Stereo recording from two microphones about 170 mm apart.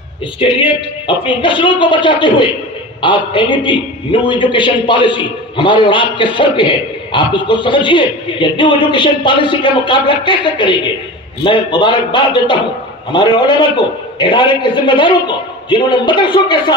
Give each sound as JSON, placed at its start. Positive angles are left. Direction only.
{"t": 0.4, "sound": "a man's voice", "side_deg": 30}